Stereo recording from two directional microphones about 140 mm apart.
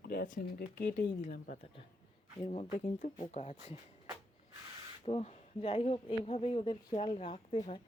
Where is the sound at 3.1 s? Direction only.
50° left (ahead or behind).